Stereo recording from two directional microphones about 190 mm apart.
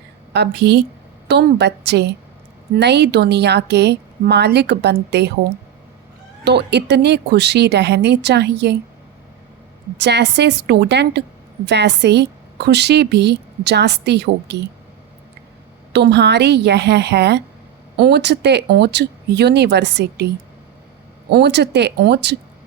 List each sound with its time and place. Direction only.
0.3 s a woman's voice: 60° right (ahead or behind)
6.4 s a woman's voice: 60° right (ahead or behind)
10.0 s a woman's voice: 60° right (ahead or behind)
15.9 s a woman's voice: 65° right (ahead or behind)